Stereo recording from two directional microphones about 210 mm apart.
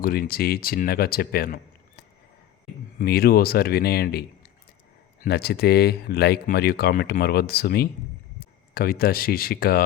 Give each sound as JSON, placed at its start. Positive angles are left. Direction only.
{"t": 0.0, "sound": "speech", "side_deg": 45}
{"t": 3.0, "sound": "speech", "side_deg": 45}
{"t": 5.2, "sound": "speech", "side_deg": 50}